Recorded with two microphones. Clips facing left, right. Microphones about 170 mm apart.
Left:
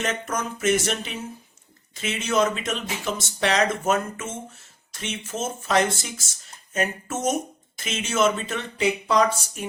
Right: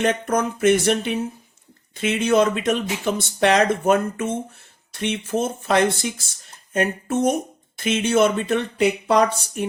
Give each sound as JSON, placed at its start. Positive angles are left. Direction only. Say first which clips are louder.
{"t": 0.0, "sound": "speech", "louder": "right 7 dB", "side_deg": -60}